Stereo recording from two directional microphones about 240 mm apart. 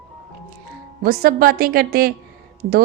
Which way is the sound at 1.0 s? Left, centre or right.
Right.